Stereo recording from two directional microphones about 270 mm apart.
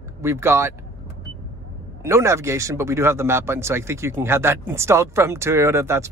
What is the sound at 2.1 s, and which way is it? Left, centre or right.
Speech, centre.